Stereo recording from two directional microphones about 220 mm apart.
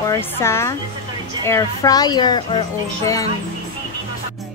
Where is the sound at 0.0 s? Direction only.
10° left (ahead or behind).